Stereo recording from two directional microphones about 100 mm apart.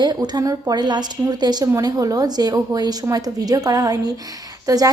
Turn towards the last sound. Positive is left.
turn(degrees=-35)  # may be behind; listen again after turning